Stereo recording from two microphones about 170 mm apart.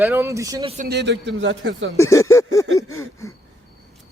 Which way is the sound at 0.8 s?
85° right.